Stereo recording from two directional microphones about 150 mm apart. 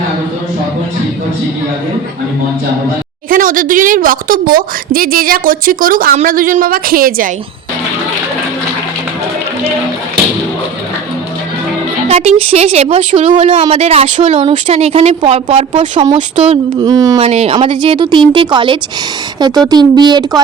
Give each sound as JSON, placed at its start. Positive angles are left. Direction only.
{"t": 3.2, "sound": "a woman's voice", "side_deg": -65}
{"t": 12.0, "sound": "a woman's voice", "side_deg": -45}
{"t": 13.5, "sound": "a woman's voice", "side_deg": -40}
{"t": 16.8, "sound": "speech", "side_deg": -25}
{"t": 17.2, "sound": "speech", "side_deg": -45}